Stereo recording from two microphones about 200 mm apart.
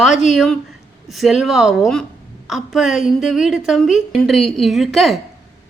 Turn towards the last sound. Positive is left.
turn(degrees=0)  # may be behind; listen again after turning